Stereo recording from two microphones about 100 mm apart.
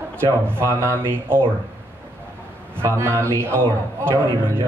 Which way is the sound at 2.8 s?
25° right (ahead or behind).